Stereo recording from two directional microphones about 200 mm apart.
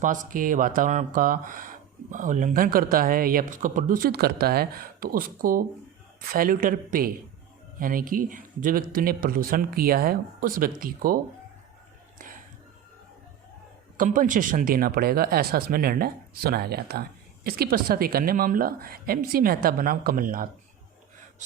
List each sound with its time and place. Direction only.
0.3 s speech: 40° right (ahead or behind)
13.9 s speech: 40° right (ahead or behind)